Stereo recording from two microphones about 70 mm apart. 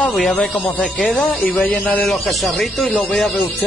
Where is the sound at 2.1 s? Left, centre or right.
Centre.